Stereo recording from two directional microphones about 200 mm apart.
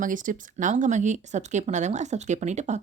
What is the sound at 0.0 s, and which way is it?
Speech, 40° right (ahead or behind).